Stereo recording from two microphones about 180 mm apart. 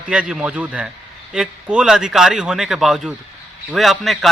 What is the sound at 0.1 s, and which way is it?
A man's voice, 5° right (ahead or behind).